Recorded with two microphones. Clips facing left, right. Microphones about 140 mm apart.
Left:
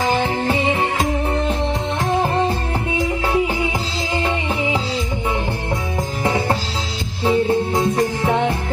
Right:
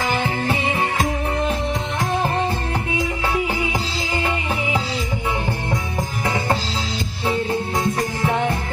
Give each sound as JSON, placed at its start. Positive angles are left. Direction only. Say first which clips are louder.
{"t": 7.2, "sound": "music", "louder": "left 6 dB", "side_deg": 25}